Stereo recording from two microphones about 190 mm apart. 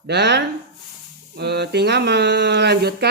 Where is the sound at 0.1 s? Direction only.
65° right (ahead or behind).